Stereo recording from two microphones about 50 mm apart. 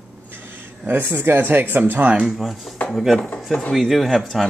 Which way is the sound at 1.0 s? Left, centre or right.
Right.